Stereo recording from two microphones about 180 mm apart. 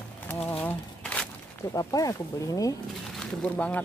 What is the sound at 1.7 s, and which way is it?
Speech, 20° left (ahead or behind).